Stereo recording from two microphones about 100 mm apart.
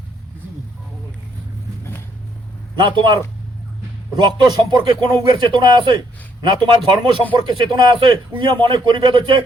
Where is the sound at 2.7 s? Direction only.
55° right (ahead or behind).